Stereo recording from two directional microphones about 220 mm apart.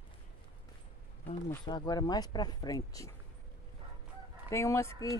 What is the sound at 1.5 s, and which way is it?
Speech, 15° left (ahead or behind).